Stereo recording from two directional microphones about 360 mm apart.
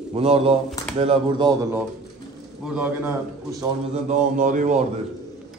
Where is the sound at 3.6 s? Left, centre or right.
Centre.